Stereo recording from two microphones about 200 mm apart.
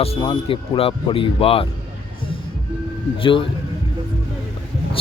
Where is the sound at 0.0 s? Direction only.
25° left (ahead or behind).